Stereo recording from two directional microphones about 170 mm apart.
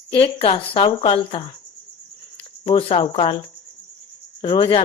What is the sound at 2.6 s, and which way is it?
A woman's voice, 35° left (ahead or behind).